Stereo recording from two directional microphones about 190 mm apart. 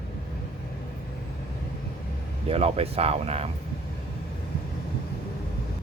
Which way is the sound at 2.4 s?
30° right (ahead or behind).